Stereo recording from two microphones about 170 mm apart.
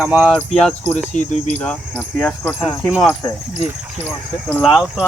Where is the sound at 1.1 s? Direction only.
45° left (ahead or behind).